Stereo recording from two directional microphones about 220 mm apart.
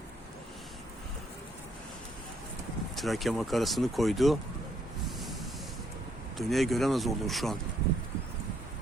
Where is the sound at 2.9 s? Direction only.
Centre (ahead or behind).